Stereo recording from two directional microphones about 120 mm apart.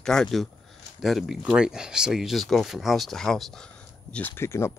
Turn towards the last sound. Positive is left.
turn(degrees=20)  # may be behind; listen again after turning